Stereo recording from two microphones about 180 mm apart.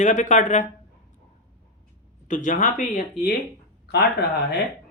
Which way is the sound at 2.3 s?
45° left (ahead or behind).